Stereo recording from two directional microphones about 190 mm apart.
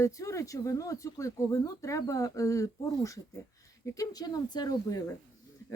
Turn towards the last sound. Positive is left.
turn(degrees=20)  # may be behind; listen again after turning